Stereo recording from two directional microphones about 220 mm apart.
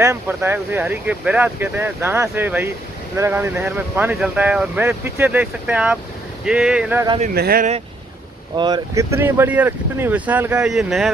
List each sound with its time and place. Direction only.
0.0 s speech: 10° right (ahead or behind)
7.3 s speech: 45° right (ahead or behind)
8.5 s speech: 20° right (ahead or behind); by 11.1 s centre (ahead or behind)